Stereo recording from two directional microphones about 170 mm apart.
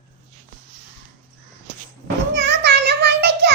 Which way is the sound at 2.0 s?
90° right.